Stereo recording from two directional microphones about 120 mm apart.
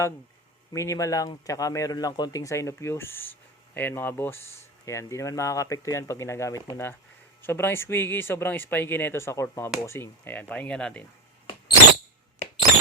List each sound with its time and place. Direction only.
0.7 s speech: 25° left (ahead or behind); by 11.0 s 5° left (ahead or behind)